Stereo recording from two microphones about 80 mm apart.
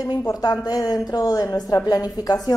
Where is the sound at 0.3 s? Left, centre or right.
Left.